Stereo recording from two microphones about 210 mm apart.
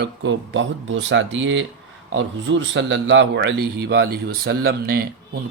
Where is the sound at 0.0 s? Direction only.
60° right (ahead or behind).